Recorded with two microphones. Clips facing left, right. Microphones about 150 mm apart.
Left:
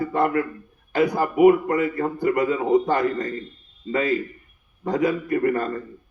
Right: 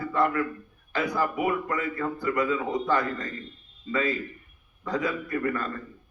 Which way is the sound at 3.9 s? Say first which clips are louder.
Left 4 dB; 30° left (ahead or behind).